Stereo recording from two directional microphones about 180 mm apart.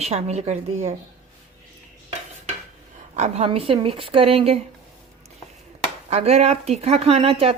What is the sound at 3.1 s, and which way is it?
A woman's voice, 35° right (ahead or behind).